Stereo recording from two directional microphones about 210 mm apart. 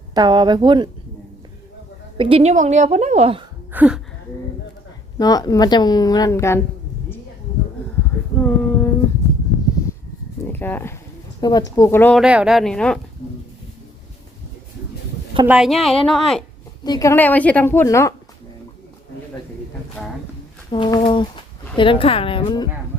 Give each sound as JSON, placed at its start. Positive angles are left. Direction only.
{"t": 0.1, "sound": "speech", "side_deg": -20}
{"t": 2.1, "sound": "a woman's voice", "side_deg": -25}
{"t": 3.7, "sound": "a sound", "side_deg": -5}
{"t": 5.1, "sound": "a woman's voice", "side_deg": 20}
{"t": 8.4, "sound": "child singing", "side_deg": 5}
{"t": 10.5, "sound": "a sound", "side_deg": 10}
{"t": 11.3, "sound": "a woman's voice", "side_deg": 20}
{"t": 12.2, "sound": "a woman's voice", "side_deg": -5}
{"t": 15.4, "sound": "a woman's voice", "side_deg": -5}
{"t": 16.8, "sound": "a woman's voice", "side_deg": 15}
{"t": 20.0, "sound": "a woman's voice", "side_deg": 0}
{"t": 20.7, "sound": "a woman's voice", "side_deg": 25}